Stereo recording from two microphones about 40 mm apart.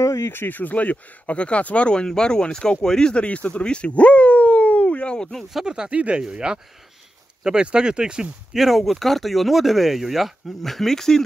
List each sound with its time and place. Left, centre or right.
0.3 s speech: left; by 3.3 s centre
3.3 s a sound: left
5.7 s speech: right
7.6 s speech: right
8.5 s speech: centre
10.6 s speech: centre